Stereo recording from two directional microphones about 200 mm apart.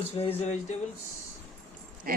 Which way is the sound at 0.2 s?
30° left (ahead or behind).